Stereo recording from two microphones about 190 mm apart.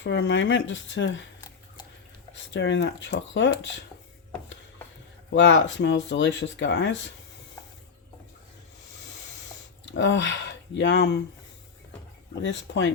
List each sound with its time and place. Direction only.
0.0 s speech: 70° left (ahead or behind)
2.3 s speech: 75° left (ahead or behind)
5.3 s speech: 75° left (ahead or behind)
9.8 s speech: 75° left (ahead or behind)
12.4 s speech: 70° left (ahead or behind)